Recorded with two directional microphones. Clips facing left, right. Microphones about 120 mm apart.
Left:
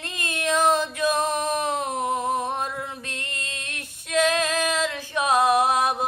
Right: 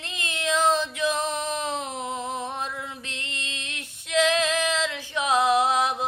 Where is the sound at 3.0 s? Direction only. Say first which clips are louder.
Left 2 dB; 50° left (ahead or behind).